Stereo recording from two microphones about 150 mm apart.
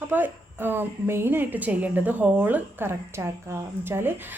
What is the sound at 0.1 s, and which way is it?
Speech, 15° right (ahead or behind).